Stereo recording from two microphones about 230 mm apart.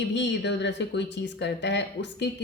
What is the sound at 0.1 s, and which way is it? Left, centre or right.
Speech, left.